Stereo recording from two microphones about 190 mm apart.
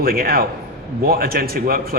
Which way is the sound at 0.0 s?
50° right (ahead or behind).